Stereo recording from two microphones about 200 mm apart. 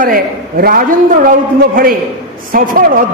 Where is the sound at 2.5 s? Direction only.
45° right (ahead or behind).